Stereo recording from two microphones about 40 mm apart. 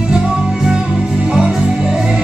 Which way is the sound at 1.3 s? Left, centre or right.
Centre.